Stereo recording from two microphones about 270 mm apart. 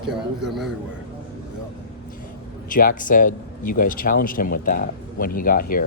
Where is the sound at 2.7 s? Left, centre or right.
Left.